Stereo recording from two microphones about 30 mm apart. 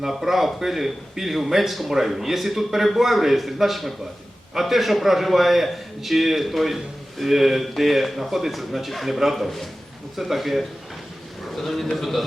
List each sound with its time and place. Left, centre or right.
0.0 s a man's voice: centre